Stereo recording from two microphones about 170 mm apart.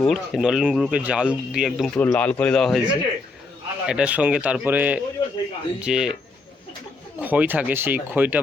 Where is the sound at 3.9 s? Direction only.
5° right (ahead or behind).